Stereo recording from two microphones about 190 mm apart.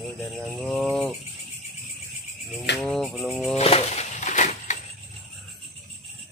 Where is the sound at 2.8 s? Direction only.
Centre (ahead or behind).